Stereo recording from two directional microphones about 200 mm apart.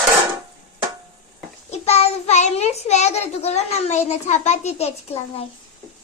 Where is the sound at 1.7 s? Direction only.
30° left (ahead or behind).